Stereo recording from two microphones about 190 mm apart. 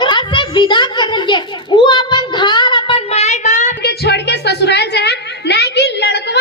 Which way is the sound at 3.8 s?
60° left (ahead or behind).